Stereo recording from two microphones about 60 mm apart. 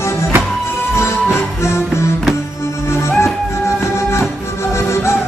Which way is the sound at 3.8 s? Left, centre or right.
Left.